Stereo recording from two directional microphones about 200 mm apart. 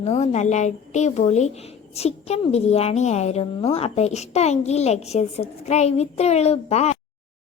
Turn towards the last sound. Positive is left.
turn(degrees=30)  # may be behind; listen again after turning